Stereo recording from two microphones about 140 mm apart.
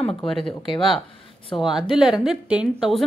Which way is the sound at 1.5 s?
5° right (ahead or behind).